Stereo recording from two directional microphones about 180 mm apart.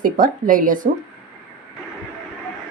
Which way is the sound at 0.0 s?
50° right (ahead or behind).